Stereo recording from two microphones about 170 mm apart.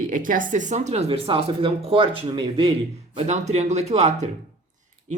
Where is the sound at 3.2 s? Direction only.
40° right (ahead or behind).